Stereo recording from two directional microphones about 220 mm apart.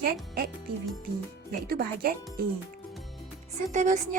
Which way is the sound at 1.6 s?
45° right (ahead or behind).